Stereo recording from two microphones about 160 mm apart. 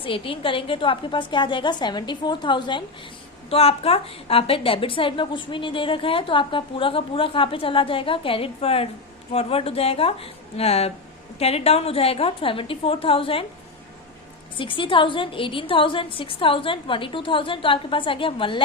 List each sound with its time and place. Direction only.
0.0 s a woman's voice: 35° left (ahead or behind)
14.6 s a woman's voice: 30° left (ahead or behind)